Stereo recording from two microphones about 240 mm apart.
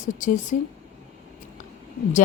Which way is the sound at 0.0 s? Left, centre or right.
Left.